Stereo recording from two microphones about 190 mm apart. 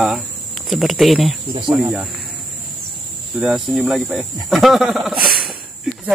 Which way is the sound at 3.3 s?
Centre (ahead or behind).